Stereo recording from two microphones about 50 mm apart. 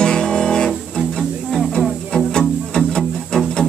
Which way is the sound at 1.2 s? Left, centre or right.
Centre.